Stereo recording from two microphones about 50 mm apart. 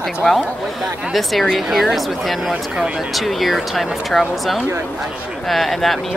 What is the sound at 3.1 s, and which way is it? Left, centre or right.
Speech, centre.